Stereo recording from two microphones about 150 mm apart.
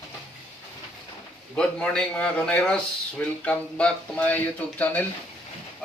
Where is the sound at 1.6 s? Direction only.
5° left (ahead or behind).